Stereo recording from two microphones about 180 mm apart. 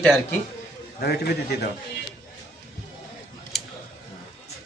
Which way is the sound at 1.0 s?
60° left (ahead or behind).